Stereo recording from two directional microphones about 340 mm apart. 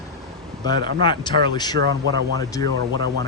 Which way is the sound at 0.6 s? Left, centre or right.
Centre.